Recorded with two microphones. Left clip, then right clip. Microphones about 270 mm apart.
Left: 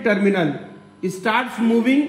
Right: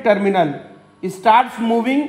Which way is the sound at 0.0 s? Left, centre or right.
Right.